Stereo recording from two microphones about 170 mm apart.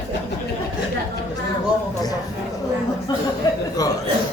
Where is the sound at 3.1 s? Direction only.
25° left (ahead or behind).